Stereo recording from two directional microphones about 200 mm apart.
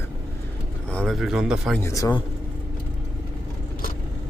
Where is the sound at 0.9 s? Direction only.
5° left (ahead or behind).